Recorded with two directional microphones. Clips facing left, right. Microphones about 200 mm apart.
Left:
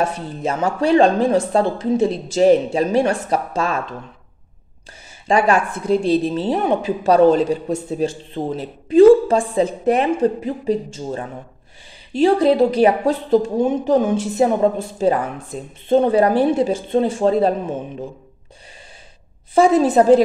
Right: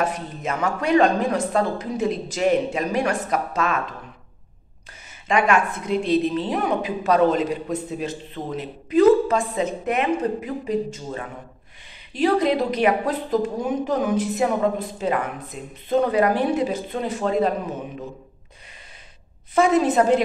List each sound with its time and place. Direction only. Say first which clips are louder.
0.0 s speech: left 4 dB; 30° left (ahead or behind)
5.3 s a woman's voice: left 3 dB; 35° left (ahead or behind)
19.5 s a woman's voice: left 4 dB; 30° left (ahead or behind)